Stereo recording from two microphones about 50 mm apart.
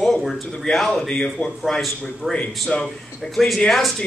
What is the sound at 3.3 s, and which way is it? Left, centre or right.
Speech, centre.